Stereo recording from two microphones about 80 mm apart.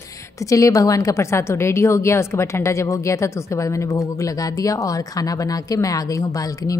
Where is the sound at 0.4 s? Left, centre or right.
Left.